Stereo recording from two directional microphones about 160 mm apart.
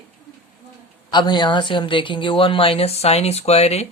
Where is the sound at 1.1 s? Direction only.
25° left (ahead or behind).